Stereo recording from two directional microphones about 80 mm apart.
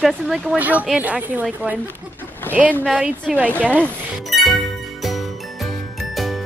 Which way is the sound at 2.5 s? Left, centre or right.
Left.